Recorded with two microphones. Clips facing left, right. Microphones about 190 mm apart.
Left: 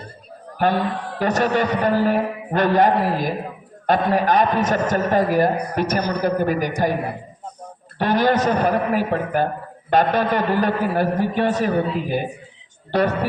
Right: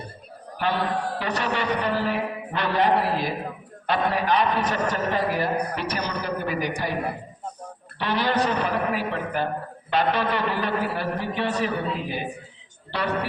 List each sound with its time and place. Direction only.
0.6 s a man's voice: 45° left (ahead or behind)
7.9 s a man's voice: 45° left (ahead or behind)